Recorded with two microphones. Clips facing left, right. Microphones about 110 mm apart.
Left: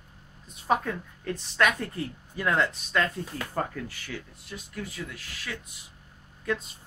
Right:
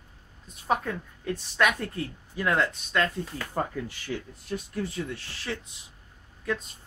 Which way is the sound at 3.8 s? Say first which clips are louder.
Right 3 dB; 15° right (ahead or behind).